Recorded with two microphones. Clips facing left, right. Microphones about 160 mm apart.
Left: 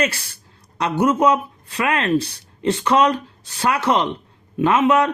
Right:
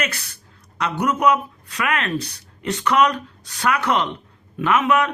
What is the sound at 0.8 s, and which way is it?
Speech, 30° left (ahead or behind).